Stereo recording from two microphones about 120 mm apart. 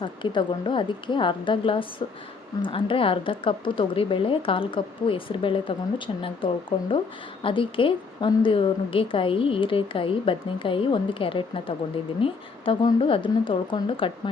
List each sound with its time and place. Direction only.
0.0 s a woman's voice: 40° left (ahead or behind)